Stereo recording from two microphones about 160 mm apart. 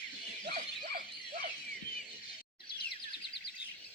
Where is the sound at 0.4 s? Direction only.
50° right (ahead or behind).